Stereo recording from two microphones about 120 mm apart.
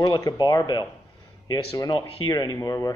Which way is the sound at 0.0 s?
35° left (ahead or behind).